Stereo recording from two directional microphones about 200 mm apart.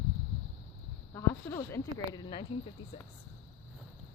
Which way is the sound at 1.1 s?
10° left (ahead or behind).